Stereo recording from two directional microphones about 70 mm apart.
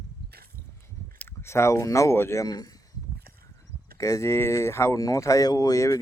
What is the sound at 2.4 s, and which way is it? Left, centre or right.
Speech, left.